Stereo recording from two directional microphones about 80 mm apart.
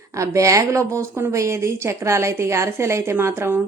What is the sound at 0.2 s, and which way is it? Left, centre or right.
A woman's voice, right.